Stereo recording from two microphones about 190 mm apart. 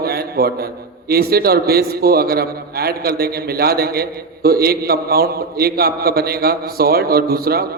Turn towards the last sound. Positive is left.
turn(degrees=-55)  # may be behind; listen again after turning